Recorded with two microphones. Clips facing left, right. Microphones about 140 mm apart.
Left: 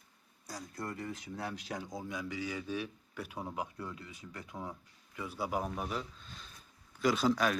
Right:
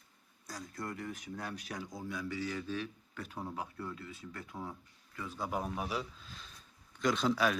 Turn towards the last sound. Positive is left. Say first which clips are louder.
# left 1 dB
turn(degrees=0)  # may be behind; listen again after turning